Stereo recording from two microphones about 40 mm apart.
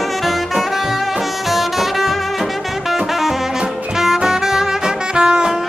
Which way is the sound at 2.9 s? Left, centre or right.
Centre.